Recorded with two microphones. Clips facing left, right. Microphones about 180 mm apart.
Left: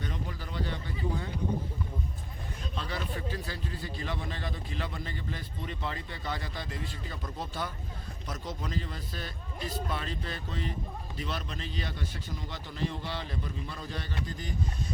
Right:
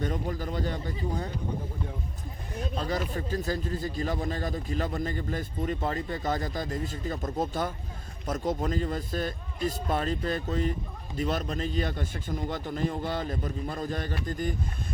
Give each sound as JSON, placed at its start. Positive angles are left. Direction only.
{"t": 0.0, "sound": "speech", "side_deg": -45}
{"t": 2.7, "sound": "speech", "side_deg": -40}